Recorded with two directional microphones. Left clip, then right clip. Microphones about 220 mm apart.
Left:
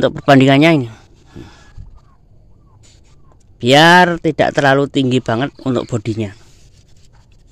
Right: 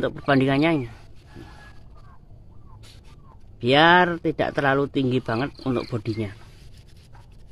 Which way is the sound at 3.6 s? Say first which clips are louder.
Left 8 dB; 40° left (ahead or behind).